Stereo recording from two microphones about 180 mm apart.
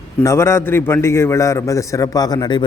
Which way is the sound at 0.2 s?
15° left (ahead or behind).